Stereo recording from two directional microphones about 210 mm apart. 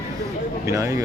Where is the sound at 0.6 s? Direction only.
15° right (ahead or behind).